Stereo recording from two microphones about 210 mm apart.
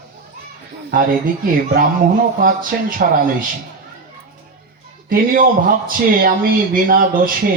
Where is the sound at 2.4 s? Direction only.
40° right (ahead or behind).